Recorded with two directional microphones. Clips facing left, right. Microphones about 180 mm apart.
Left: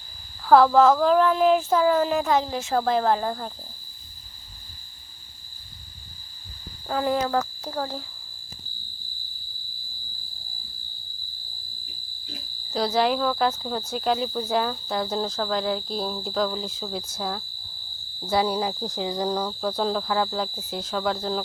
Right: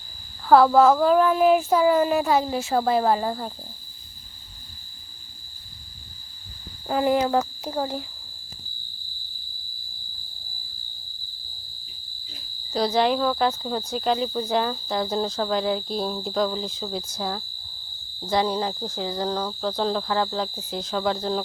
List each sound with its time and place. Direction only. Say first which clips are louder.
0.4 s speech: right 1 dB; centre (ahead or behind)
6.8 s speech: right 3 dB; 15° right (ahead or behind)
12.7 s speech: right 1 dB; centre (ahead or behind)